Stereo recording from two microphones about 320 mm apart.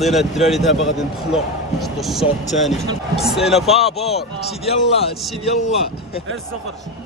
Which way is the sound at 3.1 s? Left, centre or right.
Centre.